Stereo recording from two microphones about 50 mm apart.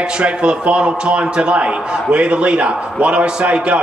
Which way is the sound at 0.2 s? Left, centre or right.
Right.